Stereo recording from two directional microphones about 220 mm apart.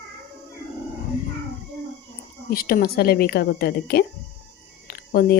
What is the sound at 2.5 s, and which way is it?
Speech, 45° left (ahead or behind).